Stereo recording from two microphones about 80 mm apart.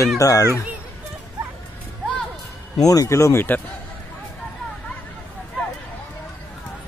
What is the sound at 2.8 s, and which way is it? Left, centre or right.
Speech, left.